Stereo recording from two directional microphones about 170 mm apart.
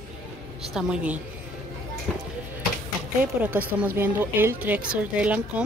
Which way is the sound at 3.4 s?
10° right (ahead or behind).